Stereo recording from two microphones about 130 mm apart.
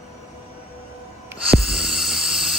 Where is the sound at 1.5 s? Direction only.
Centre (ahead or behind).